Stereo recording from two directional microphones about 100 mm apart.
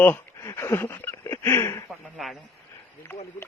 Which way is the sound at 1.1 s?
30° left (ahead or behind).